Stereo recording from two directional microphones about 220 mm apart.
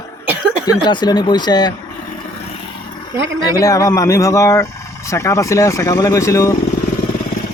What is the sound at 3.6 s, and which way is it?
Speech, 15° left (ahead or behind).